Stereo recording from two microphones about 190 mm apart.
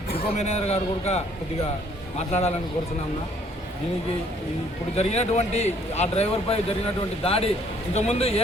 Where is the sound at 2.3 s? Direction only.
35° left (ahead or behind).